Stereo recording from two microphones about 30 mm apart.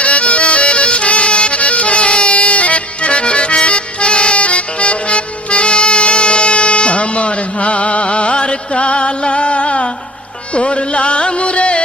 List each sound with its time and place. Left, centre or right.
0.0 s music: left